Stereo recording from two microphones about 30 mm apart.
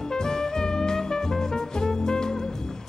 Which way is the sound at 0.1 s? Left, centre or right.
Left.